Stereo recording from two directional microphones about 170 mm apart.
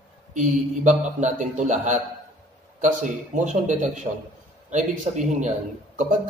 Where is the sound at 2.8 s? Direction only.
50° right (ahead or behind).